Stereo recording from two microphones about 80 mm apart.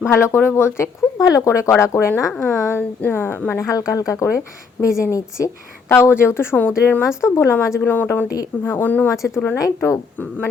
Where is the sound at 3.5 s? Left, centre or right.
Left.